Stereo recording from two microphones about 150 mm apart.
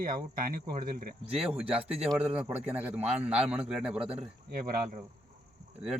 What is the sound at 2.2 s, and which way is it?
A man's voice, 5° right (ahead or behind).